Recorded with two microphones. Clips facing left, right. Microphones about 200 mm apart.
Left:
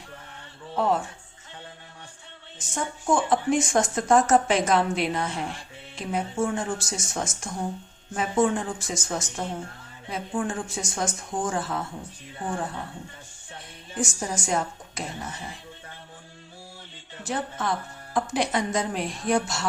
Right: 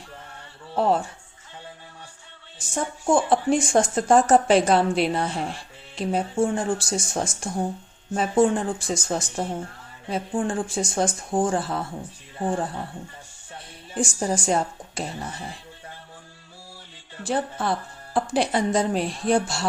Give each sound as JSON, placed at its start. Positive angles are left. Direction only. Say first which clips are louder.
{"t": 0.8, "sound": "speech", "louder": "right 3 dB", "side_deg": -35}
{"t": 3.1, "sound": "speech", "louder": "right 3 dB", "side_deg": -30}
{"t": 13.9, "sound": "speech", "louder": "right 5 dB", "side_deg": -35}
{"t": 17.2, "sound": "speech", "louder": "right 4 dB", "side_deg": -30}